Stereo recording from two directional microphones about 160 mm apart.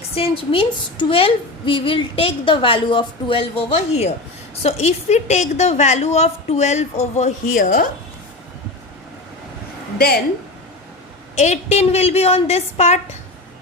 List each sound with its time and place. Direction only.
0.2 s a woman's voice: 35° left (ahead or behind); by 7.9 s 60° left (ahead or behind)
11.3 s a woman's voice: 45° left (ahead or behind)